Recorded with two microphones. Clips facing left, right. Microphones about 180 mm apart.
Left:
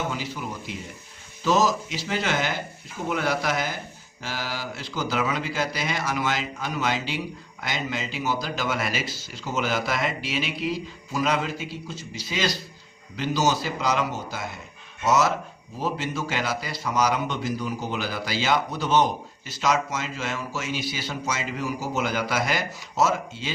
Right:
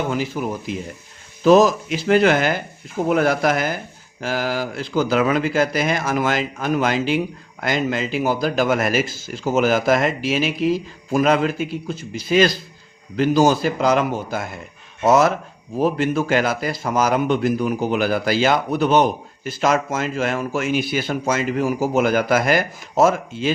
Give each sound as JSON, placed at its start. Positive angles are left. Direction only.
{"t": 0.1, "sound": "speech", "side_deg": -50}